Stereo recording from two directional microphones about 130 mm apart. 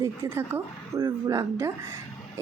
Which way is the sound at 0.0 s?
20° right (ahead or behind).